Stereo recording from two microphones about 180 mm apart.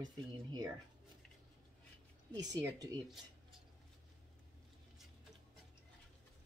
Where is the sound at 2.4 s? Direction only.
20° right (ahead or behind).